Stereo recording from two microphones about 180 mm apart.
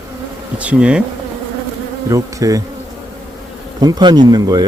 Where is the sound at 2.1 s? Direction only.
20° right (ahead or behind).